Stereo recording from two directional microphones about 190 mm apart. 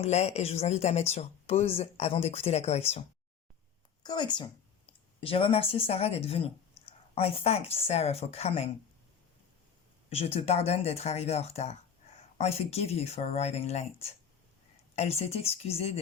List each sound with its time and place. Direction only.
0.0 s speech: 35° left (ahead or behind)
4.0 s speech: 25° left (ahead or behind)
10.1 s speech: 30° left (ahead or behind)